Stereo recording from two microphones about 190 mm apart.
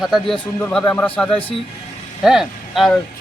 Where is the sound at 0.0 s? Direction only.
Centre (ahead or behind).